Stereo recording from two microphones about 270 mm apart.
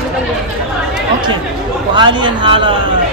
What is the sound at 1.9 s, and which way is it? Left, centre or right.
Speech, centre.